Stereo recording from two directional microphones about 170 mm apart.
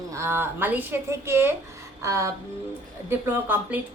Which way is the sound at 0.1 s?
15° right (ahead or behind).